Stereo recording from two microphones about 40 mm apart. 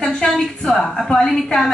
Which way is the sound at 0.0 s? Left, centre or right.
Centre.